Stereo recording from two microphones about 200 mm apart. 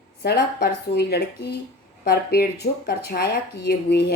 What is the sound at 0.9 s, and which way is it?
Speech, 55° left (ahead or behind).